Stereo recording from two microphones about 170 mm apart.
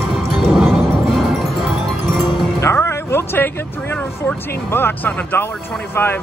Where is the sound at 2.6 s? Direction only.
15° left (ahead or behind).